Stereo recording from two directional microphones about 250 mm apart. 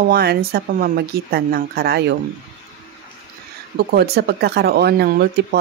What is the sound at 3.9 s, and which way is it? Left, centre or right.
Speech, right.